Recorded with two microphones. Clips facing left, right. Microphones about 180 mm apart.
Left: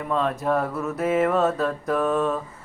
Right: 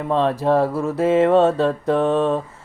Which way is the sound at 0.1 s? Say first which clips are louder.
Right 6 dB; 30° right (ahead or behind).